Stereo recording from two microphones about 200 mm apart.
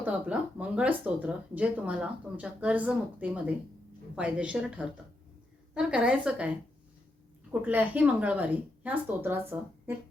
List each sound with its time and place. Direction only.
0.0 s a woman's voice: 5° right (ahead or behind)
7.6 s speech: 10° right (ahead or behind)